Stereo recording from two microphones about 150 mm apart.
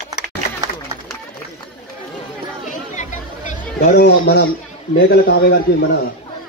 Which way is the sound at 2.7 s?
55° left (ahead or behind).